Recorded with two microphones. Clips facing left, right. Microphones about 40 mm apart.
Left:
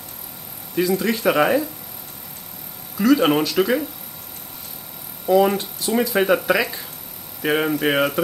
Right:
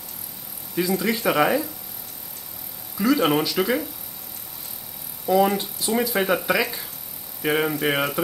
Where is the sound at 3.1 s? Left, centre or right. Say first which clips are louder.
Left 3 dB; centre.